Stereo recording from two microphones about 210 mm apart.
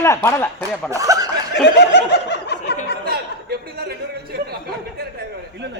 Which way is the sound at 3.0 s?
45° right (ahead or behind).